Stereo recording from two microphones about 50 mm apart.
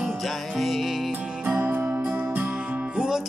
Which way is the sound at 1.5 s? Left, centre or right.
Right.